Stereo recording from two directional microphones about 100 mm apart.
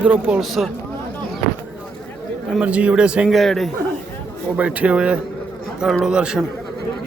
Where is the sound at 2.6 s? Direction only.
15° right (ahead or behind).